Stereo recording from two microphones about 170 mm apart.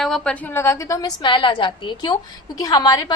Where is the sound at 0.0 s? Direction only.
5° left (ahead or behind).